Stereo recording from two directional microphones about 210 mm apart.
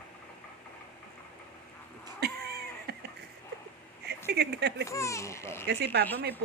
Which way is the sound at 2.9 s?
50° right (ahead or behind).